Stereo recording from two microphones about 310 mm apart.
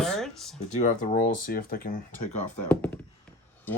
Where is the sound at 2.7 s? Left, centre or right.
Centre.